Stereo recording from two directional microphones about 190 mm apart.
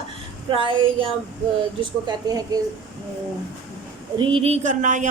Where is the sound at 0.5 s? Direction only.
25° right (ahead or behind).